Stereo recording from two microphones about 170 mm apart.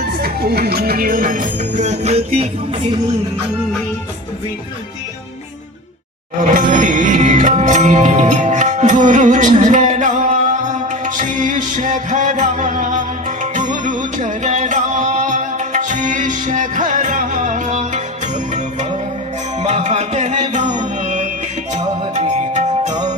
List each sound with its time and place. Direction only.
0.0 s music: 65° right (ahead or behind); by 2.8 s 35° right (ahead or behind)
6.4 s music: 50° right (ahead or behind)